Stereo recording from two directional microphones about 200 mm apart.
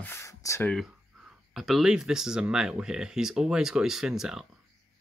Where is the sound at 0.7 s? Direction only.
Centre (ahead or behind).